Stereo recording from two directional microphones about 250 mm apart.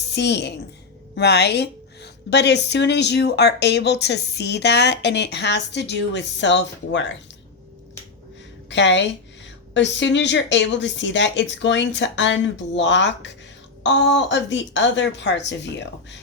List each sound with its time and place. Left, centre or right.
0.1 s a woman's voice: left
8.7 s a woman's voice: left